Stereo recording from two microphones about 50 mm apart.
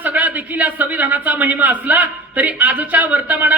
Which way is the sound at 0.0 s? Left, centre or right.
Right.